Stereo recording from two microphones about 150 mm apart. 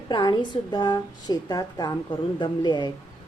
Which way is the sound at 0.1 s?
30° left (ahead or behind).